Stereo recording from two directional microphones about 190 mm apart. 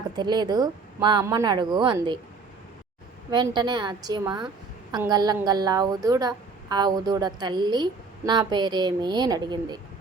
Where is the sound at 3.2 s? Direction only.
20° right (ahead or behind).